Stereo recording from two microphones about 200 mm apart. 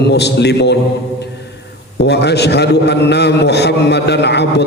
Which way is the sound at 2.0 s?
55° left (ahead or behind).